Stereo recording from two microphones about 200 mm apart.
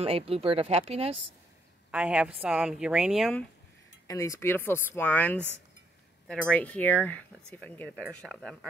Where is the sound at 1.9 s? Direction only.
5° right (ahead or behind).